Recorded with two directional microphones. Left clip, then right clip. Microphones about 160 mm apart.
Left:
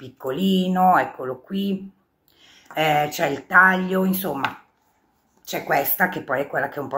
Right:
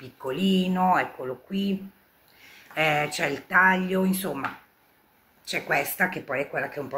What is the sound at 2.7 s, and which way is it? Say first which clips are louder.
Speech: left 4 dB; 15° right (ahead or behind).